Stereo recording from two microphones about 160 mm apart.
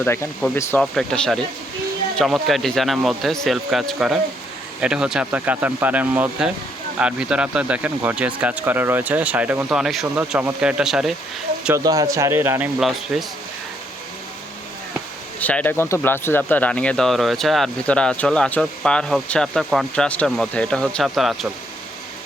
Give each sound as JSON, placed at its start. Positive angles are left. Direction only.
{"t": 0.0, "sound": "speech", "side_deg": 15}
{"t": 0.8, "sound": "speech", "side_deg": 5}
{"t": 11.8, "sound": "a man's voice", "side_deg": -20}
{"t": 15.4, "sound": "speech", "side_deg": 10}